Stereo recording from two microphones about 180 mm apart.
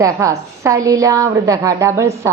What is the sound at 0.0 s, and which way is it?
A woman's voice, 15° right (ahead or behind).